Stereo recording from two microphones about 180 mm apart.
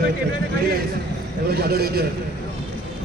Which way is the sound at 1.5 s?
60° right (ahead or behind).